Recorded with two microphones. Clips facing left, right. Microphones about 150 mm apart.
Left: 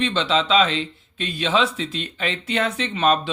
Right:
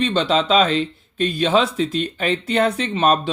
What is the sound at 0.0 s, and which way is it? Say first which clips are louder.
Speech: right 3 dB; 45° right (ahead or behind).